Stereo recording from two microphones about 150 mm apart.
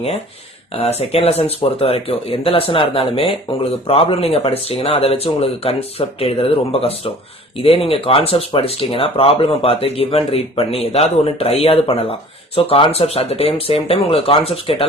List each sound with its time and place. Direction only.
0.7 s speech: 45° left (ahead or behind)